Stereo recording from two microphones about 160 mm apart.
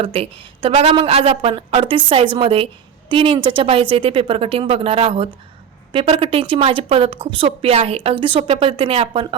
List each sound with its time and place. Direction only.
0.0 s a woman's voice: 35° right (ahead or behind)